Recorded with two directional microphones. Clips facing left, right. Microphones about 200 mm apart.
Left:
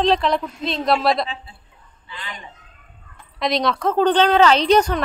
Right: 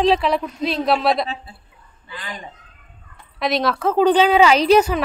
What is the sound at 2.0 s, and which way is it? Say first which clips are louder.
Chicken: right 2 dB; 45° right (ahead or behind).